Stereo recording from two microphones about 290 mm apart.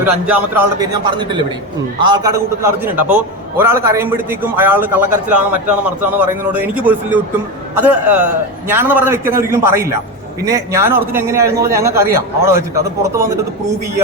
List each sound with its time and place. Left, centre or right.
0.0 s a man's voice: centre